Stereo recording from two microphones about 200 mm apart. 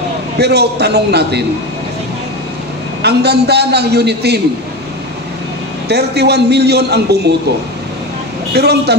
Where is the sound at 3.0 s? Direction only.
55° right (ahead or behind).